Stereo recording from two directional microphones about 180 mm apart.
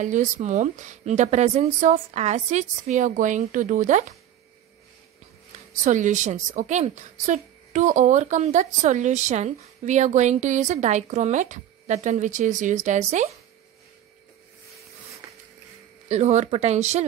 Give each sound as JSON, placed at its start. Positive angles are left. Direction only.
{"t": 0.0, "sound": "a woman's voice", "side_deg": -45}
{"t": 5.9, "sound": "a woman's voice", "side_deg": -45}
{"t": 16.1, "sound": "a woman's voice", "side_deg": -40}